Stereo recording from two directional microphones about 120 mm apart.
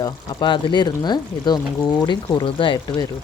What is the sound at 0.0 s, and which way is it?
Speech, 40° left (ahead or behind).